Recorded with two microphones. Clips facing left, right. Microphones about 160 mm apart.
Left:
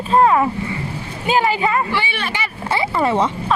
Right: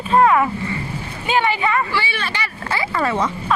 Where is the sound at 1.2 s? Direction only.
40° left (ahead or behind).